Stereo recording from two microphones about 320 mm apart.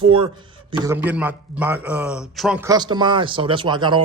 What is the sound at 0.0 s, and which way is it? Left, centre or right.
A man's voice, centre.